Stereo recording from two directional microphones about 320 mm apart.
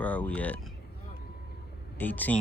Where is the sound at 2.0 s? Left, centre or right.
Centre.